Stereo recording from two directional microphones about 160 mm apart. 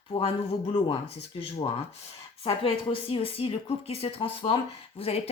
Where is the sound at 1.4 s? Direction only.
35° left (ahead or behind).